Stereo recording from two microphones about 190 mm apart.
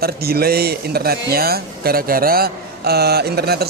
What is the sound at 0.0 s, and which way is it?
A man's voice, 55° right (ahead or behind).